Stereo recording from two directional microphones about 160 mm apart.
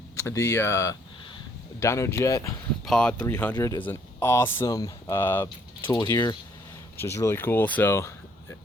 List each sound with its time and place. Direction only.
0.2 s speech: 15° left (ahead or behind)
2.8 s speech: 5° left (ahead or behind)
5.8 s speech: 25° left (ahead or behind)